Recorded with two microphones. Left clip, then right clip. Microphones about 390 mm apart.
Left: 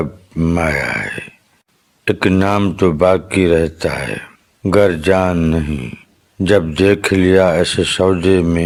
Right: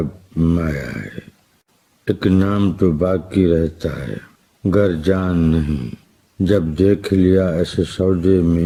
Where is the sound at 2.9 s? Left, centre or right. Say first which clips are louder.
Left 8 dB; left.